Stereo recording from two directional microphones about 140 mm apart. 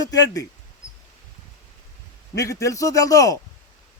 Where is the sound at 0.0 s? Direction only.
25° left (ahead or behind).